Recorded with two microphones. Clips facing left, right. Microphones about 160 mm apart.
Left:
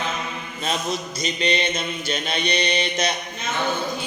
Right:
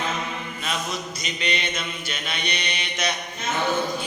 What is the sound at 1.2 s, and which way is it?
Mantra, 30° left (ahead or behind).